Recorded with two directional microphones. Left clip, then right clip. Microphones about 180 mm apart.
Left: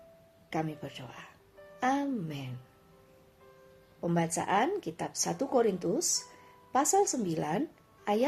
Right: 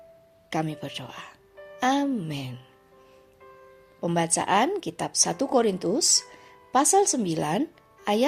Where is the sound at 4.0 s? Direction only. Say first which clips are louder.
Right 6 dB; 40° right (ahead or behind).